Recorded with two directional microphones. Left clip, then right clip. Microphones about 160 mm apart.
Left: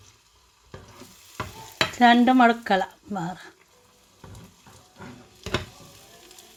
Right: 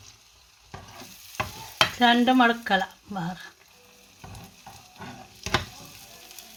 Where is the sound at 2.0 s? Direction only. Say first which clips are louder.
Left 4 dB; 30° left (ahead or behind).